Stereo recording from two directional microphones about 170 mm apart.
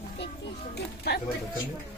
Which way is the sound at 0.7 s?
70° left (ahead or behind).